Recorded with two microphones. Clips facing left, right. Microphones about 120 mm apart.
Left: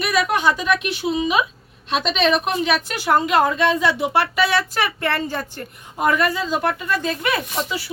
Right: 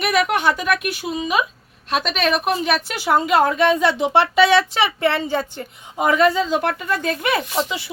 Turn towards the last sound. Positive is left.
turn(degrees=-20)  # may be behind; listen again after turning